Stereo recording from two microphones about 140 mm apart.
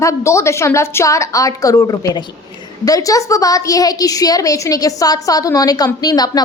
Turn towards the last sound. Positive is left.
turn(degrees=25)  # may be behind; listen again after turning